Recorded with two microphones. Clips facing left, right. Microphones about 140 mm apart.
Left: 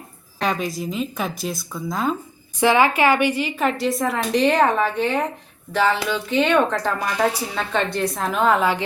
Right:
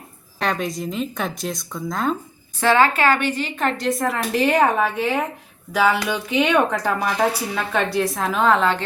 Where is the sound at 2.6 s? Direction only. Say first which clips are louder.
Even; 15° left (ahead or behind).